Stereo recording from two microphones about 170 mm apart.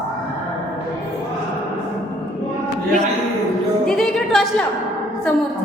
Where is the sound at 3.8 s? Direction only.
5° left (ahead or behind).